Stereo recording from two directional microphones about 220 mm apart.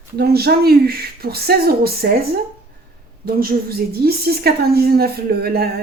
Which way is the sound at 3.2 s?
40° right (ahead or behind).